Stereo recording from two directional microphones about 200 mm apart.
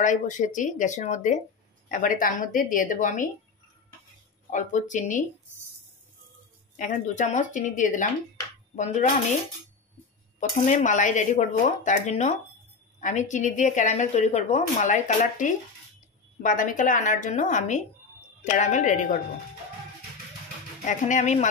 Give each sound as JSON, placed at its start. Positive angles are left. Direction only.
{"t": 0.0, "sound": "a woman's voice", "side_deg": 40}
{"t": 4.5, "sound": "a woman's voice", "side_deg": 40}
{"t": 6.8, "sound": "a woman's voice", "side_deg": 40}
{"t": 10.7, "sound": "a woman's voice", "side_deg": 40}
{"t": 20.8, "sound": "a woman's voice", "side_deg": 40}